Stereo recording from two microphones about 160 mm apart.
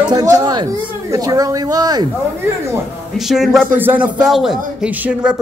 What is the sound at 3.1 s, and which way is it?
A man's voice, centre (ahead or behind).